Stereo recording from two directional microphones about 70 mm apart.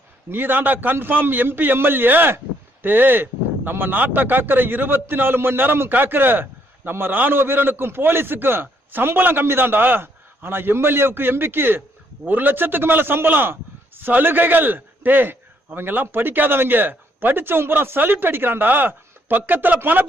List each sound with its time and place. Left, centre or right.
0.3 s a man's voice: right